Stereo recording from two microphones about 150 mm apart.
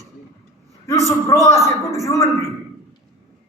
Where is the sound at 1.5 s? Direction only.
20° left (ahead or behind).